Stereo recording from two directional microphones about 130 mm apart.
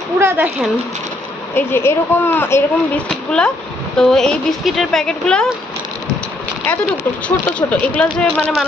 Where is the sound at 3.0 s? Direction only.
5° left (ahead or behind).